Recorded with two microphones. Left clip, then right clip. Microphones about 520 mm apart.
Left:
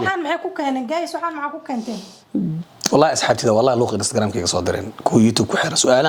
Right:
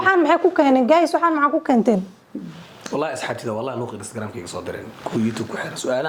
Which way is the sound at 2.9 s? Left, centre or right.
Left.